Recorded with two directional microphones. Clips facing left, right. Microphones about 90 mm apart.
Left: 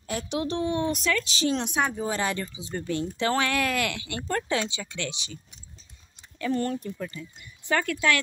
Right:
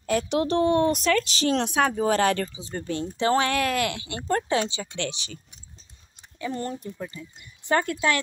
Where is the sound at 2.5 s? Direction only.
35° right (ahead or behind).